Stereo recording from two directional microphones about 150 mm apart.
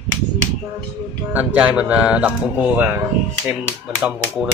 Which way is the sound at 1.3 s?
10° right (ahead or behind).